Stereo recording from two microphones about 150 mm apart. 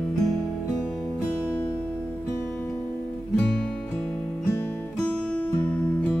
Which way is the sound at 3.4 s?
10° left (ahead or behind).